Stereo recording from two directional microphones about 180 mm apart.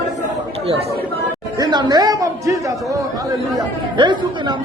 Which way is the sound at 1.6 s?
25° right (ahead or behind).